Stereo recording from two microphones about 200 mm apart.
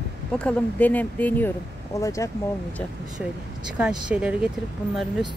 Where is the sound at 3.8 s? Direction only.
5° right (ahead or behind).